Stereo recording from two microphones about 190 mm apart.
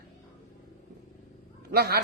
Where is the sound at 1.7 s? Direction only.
55° right (ahead or behind).